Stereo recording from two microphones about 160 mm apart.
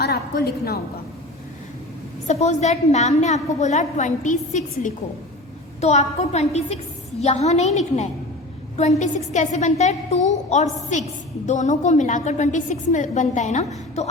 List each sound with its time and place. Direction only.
0.0 s a woman's voice: 90° left
2.2 s a woman's voice: 45° left (ahead or behind)